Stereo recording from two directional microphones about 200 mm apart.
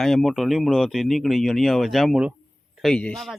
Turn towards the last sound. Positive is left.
turn(degrees=0)  # may be behind; listen again after turning